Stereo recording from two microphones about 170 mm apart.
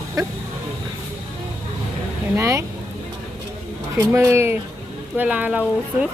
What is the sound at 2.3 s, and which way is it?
Speech, 15° right (ahead or behind).